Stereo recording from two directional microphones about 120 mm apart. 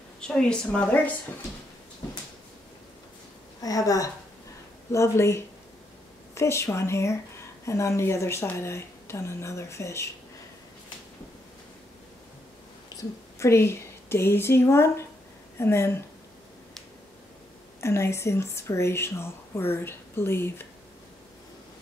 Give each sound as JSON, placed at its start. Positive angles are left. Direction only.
{"t": 0.3, "sound": "a woman's voice", "side_deg": 5}
{"t": 3.6, "sound": "speech", "side_deg": 30}
{"t": 12.9, "sound": "speech", "side_deg": 25}
{"t": 17.7, "sound": "speech", "side_deg": 20}